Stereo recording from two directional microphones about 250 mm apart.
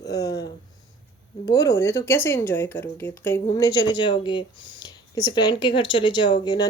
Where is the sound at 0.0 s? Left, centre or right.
Centre.